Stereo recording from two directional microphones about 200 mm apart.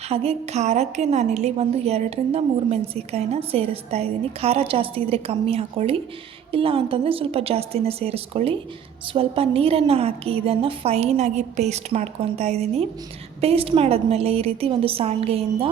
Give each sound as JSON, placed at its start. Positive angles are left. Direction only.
{"t": 0.1, "sound": "a woman's voice", "side_deg": -30}